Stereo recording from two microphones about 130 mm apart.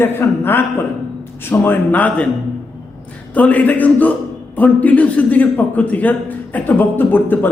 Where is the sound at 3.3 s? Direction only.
10° left (ahead or behind).